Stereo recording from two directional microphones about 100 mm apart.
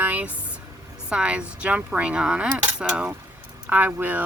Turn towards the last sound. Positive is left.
turn(degrees=-15)  # may be behind; listen again after turning